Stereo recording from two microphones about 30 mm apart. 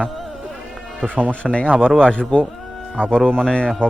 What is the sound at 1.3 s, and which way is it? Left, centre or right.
Speech, left.